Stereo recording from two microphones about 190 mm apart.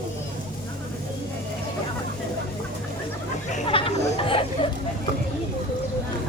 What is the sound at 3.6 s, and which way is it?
Chatter, 30° left (ahead or behind).